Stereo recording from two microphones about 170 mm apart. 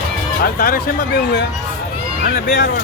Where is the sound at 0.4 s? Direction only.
60° left (ahead or behind).